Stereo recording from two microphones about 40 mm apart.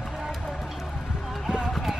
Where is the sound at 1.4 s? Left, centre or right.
Centre.